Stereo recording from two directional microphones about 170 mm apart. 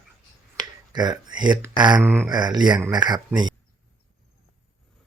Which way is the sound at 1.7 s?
25° right (ahead or behind).